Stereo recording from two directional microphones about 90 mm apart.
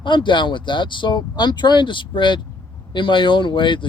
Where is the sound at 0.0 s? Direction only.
60° left (ahead or behind).